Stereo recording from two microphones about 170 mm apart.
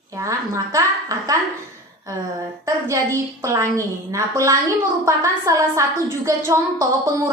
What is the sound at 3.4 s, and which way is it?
A woman's voice, 15° right (ahead or behind).